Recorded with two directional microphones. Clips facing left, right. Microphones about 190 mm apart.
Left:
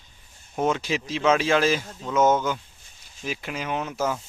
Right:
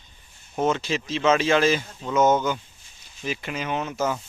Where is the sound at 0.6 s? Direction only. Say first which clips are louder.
Right 1 dB; 10° left (ahead or behind).